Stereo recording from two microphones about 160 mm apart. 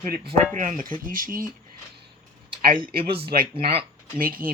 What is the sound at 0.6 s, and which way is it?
Speech, 55° right (ahead or behind).